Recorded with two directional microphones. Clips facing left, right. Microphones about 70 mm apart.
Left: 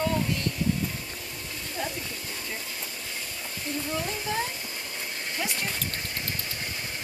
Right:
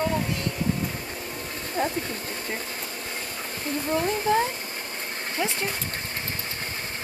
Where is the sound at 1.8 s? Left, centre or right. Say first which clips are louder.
Right 7 dB; right.